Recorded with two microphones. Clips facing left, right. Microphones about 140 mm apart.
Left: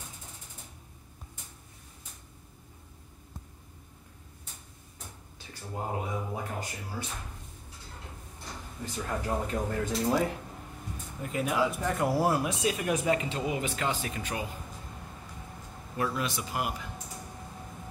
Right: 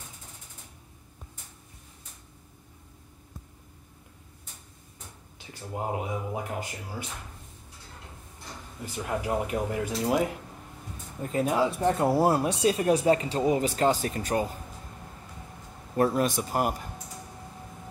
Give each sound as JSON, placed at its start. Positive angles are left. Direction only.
{"t": 5.5, "sound": "speech", "side_deg": -15}
{"t": 8.9, "sound": "speech", "side_deg": -15}
{"t": 11.3, "sound": "speech", "side_deg": -30}
{"t": 16.0, "sound": "a man's voice", "side_deg": -45}